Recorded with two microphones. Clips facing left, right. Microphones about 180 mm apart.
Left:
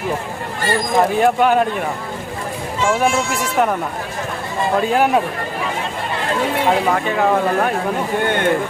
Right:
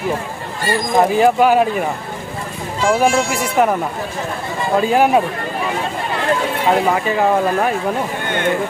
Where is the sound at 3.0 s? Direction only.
5° right (ahead or behind).